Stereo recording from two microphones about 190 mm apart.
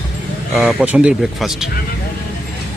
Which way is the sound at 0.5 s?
Centre (ahead or behind).